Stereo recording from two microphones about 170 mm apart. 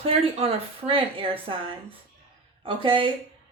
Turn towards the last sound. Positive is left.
turn(degrees=-30)  # may be behind; listen again after turning